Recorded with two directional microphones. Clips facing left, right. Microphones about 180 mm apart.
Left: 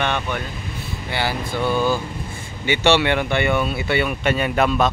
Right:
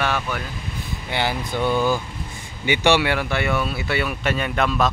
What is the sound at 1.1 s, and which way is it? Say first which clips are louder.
Speech: even; 20° right (ahead or behind).